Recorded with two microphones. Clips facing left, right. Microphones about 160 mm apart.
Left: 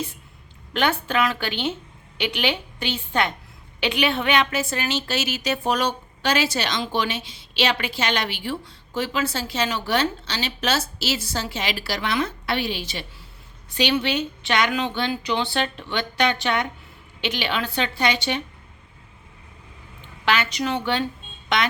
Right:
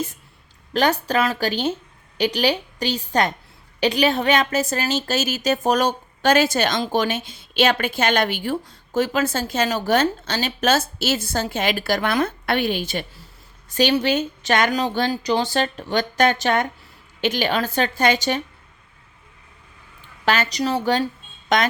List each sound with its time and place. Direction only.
0.7 s a woman's voice: 40° right (ahead or behind)
20.2 s a woman's voice: 40° right (ahead or behind)